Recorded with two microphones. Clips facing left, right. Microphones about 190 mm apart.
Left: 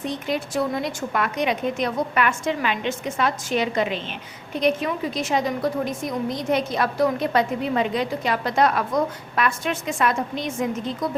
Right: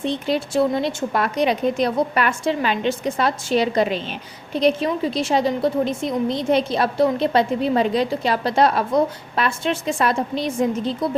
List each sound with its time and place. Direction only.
0.0 s a woman's voice: 30° right (ahead or behind)